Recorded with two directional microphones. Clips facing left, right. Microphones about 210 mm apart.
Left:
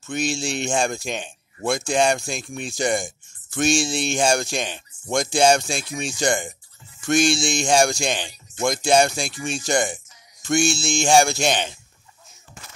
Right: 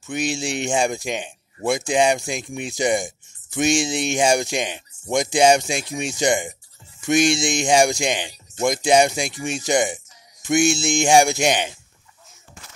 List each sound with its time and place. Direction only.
0.0 s speech: 15° right (ahead or behind)